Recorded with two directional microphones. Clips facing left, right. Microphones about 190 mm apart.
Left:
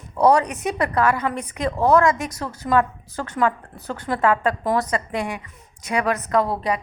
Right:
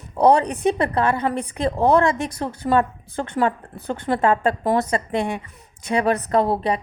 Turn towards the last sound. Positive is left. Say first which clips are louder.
# right 2 dB
turn(degrees=-30)  # may be behind; listen again after turning